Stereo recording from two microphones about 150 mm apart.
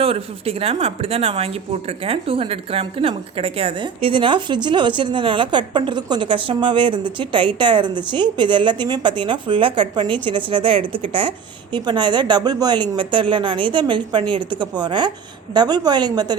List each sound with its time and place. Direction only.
0.0 s a woman's voice: 40° right (ahead or behind)